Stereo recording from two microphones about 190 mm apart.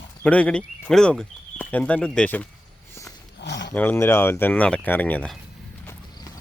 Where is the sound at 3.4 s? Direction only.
65° left (ahead or behind).